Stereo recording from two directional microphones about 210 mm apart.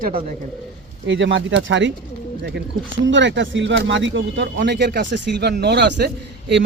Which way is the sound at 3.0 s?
60° right (ahead or behind).